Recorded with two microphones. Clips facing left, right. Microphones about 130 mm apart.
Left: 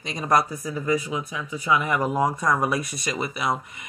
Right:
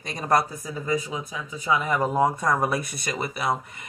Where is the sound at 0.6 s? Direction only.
30° right (ahead or behind).